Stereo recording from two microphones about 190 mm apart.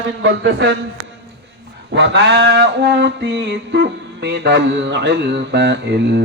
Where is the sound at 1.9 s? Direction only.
65° right (ahead or behind).